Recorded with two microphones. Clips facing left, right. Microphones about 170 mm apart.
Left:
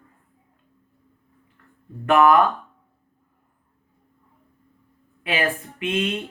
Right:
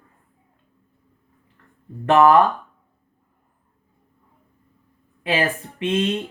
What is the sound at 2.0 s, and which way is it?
Speech, 30° right (ahead or behind).